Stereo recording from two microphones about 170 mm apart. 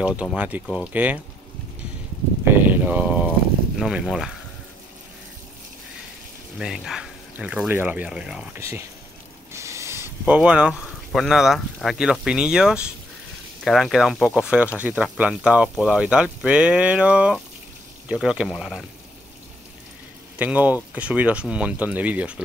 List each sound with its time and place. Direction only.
0.0 s speech: 5° right (ahead or behind)
2.4 s a sound: 10° right (ahead or behind)
3.8 s speech: centre (ahead or behind)
6.6 s speech: 5° right (ahead or behind)
8.5 s speech: 15° right (ahead or behind)
9.5 s a sound: 15° right (ahead or behind)
11.1 s speech: centre (ahead or behind)
20.3 s speech: 10° right (ahead or behind)